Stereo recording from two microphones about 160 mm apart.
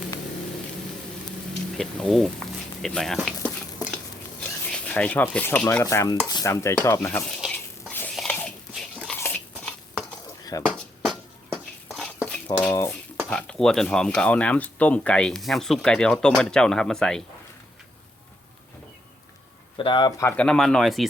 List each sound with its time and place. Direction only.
1.7 s speech: centre (ahead or behind)
3.9 s a sound: 5° left (ahead or behind)
5.8 s speech: 20° left (ahead or behind)
6.2 s stir: 20° left (ahead or behind)
7.5 s biting: 10° left (ahead or behind)
9.1 s a sound: 10° left (ahead or behind)
10.5 s speech: 20° left (ahead or behind)
11.9 s a sound: 5° left (ahead or behind)
12.6 s dishes: 15° left (ahead or behind)
13.2 s speech: 5° left (ahead or behind)
19.7 s speech: 30° left (ahead or behind)
20.3 s speech: 5° left (ahead or behind)